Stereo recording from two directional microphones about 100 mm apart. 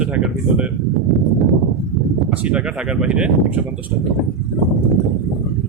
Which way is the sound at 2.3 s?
15° right (ahead or behind).